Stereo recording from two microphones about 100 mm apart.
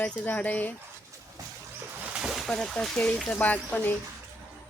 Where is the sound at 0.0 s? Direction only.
15° left (ahead or behind).